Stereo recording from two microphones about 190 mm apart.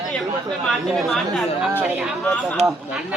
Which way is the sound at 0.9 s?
Centre (ahead or behind).